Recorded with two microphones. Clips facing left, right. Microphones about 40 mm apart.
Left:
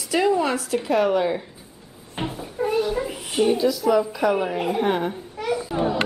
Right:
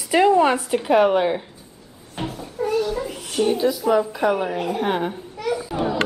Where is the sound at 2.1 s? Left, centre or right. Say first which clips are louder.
Even; centre.